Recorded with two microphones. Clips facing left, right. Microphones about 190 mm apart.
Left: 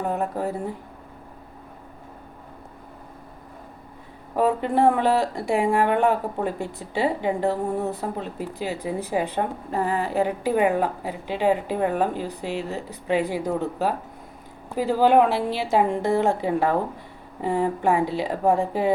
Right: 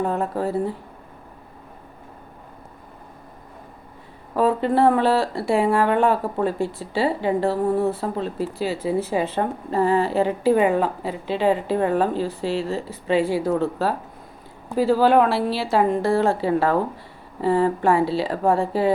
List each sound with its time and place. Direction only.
0.3 s speech: 15° left (ahead or behind)
4.4 s a woman's voice: 15° left (ahead or behind)